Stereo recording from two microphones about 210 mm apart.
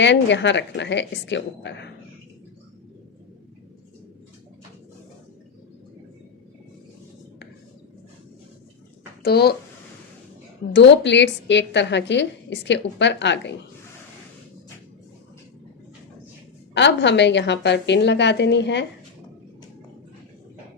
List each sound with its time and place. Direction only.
0.0 s a woman's voice: 60° left (ahead or behind)
9.2 s speech: 50° left (ahead or behind)
10.7 s a woman's voice: 55° left (ahead or behind)
16.7 s a woman's voice: 55° left (ahead or behind)